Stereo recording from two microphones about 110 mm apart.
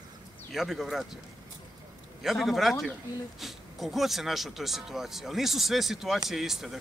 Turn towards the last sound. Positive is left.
turn(degrees=-5)  # may be behind; listen again after turning